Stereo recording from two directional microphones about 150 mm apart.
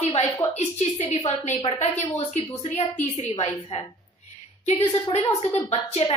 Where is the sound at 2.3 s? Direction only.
50° left (ahead or behind).